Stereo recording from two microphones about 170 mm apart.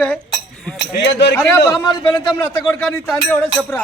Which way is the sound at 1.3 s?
15° left (ahead or behind).